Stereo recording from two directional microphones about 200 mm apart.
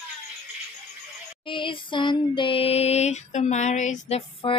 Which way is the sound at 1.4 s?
25° left (ahead or behind).